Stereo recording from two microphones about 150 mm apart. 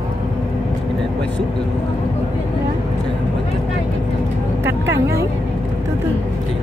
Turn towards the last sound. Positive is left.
turn(degrees=-20)  # may be behind; listen again after turning